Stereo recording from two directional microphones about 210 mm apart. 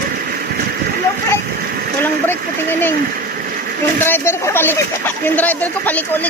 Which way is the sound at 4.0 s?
10° left (ahead or behind).